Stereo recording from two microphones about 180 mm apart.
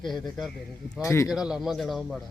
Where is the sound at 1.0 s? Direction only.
15° left (ahead or behind).